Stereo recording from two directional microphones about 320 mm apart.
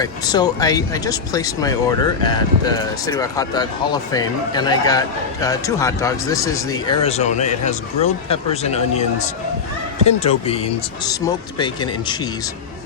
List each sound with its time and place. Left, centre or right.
0.0 s a man's voice: centre